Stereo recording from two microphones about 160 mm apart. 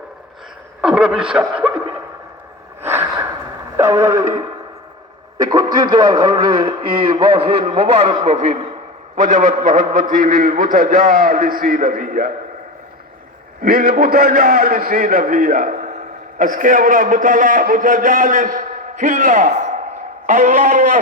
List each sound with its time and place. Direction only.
0.8 s speech: 5° right (ahead or behind)
2.8 s gasp: 15° right (ahead or behind)
3.8 s radio: 20° right (ahead or behind)
5.4 s a man's voice: 25° right (ahead or behind); by 12.3 s 60° right (ahead or behind)
13.6 s a man's voice: 65° right (ahead or behind)